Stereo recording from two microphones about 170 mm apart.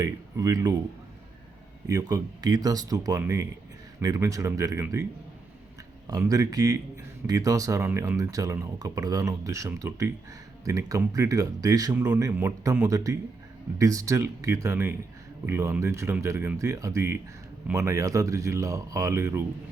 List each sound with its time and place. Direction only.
0.0 s speech: 20° right (ahead or behind)
1.9 s speech: 20° right (ahead or behind)
6.1 s speech: 20° right (ahead or behind)